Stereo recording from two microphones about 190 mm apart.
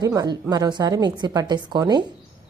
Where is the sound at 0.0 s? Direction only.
20° right (ahead or behind).